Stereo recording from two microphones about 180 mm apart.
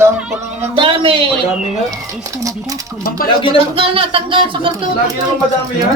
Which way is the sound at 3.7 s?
30° right (ahead or behind).